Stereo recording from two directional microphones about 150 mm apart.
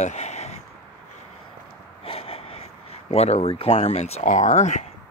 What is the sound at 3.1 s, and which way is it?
Speech, 45° left (ahead or behind).